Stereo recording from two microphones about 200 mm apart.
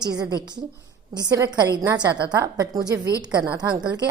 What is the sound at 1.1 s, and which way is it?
A woman's voice, 20° right (ahead or behind).